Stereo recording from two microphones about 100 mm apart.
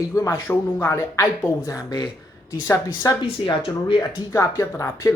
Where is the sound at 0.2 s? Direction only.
25° left (ahead or behind).